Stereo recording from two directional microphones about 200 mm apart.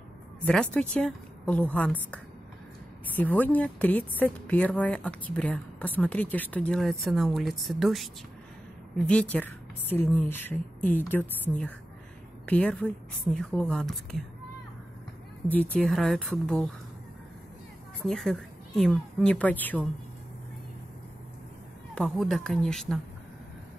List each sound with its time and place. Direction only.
0.5 s a woman's voice: 5° left (ahead or behind)
3.2 s a woman's voice: 10° left (ahead or behind)
12.4 s a woman's voice: 5° left (ahead or behind)
15.5 s a woman's voice: 5° left (ahead or behind)
18.0 s a woman's voice: centre (ahead or behind)
21.9 s a woman's voice: 5° left (ahead or behind)